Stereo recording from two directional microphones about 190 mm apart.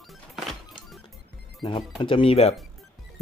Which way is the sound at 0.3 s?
Centre (ahead or behind).